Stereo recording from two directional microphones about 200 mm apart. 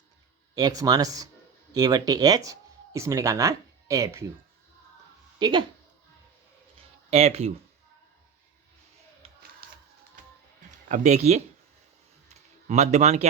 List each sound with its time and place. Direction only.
0.5 s speech: 20° right (ahead or behind)
5.4 s speech: 20° right (ahead or behind)
7.1 s speech: 30° right (ahead or behind)
9.6 s music: 50° right (ahead or behind)
10.8 s speech: 40° right (ahead or behind)
12.3 s a sound: 35° right (ahead or behind)